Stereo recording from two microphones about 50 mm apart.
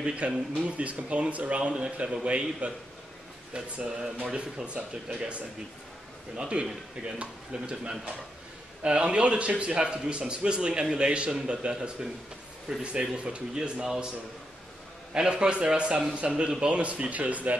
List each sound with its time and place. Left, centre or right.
0.0 s a man's voice: right
3.8 s speech: centre
7.2 s a man's voice: right
15.1 s a man's voice: centre